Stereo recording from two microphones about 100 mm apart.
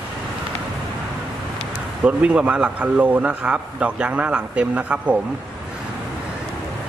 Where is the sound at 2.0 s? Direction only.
10° right (ahead or behind).